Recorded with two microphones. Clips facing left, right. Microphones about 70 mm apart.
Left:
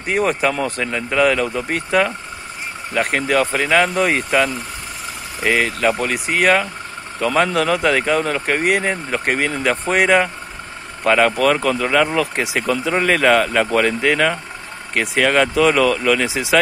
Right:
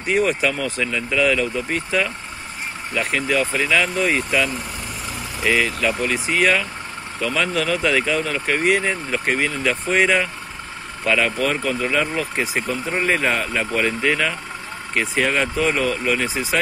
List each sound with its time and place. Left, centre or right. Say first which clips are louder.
0.0 s speech: left 1 dB; left